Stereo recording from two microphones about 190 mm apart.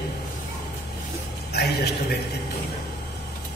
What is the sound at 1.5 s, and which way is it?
Speech, 55° left (ahead or behind).